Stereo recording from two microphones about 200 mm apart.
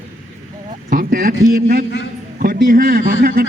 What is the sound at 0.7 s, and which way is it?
A man's voice, 45° right (ahead or behind).